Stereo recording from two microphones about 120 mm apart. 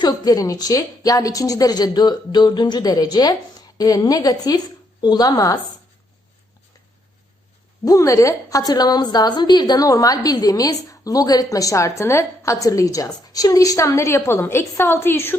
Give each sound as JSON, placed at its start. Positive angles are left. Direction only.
{"t": 0.0, "sound": "a woman's voice", "side_deg": 30}
{"t": 7.9, "sound": "a woman's voice", "side_deg": 25}